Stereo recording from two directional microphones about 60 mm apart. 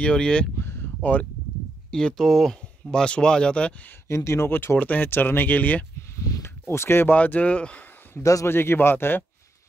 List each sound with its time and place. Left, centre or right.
0.0 s speech: centre
0.6 s a sound: left
1.9 s speech: centre
2.2 s speech: centre
2.9 s speech: centre
4.1 s speech: left
4.5 s speech: left
4.7 s speech: left
6.4 s a sound: left
7.1 s speech: left
8.2 s a man's voice: left
8.5 s speech: left